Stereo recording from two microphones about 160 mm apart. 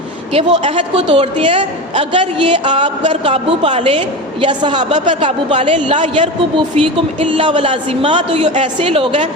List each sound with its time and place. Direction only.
0.3 s a woman's voice: 35° right (ahead or behind)
6.6 s a woman's voice: 30° right (ahead or behind)